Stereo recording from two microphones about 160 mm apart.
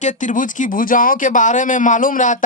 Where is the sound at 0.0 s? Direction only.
50° left (ahead or behind).